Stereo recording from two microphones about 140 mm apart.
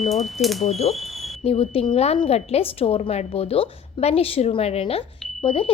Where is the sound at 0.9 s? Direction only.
45° left (ahead or behind).